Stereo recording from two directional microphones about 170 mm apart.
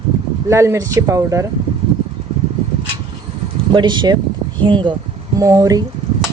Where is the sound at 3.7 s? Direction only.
25° right (ahead or behind).